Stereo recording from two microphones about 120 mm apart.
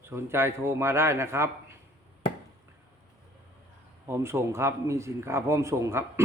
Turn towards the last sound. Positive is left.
turn(degrees=-20)  # may be behind; listen again after turning